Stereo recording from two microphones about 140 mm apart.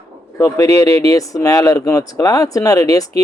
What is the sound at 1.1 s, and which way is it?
A man's voice, 25° left (ahead or behind).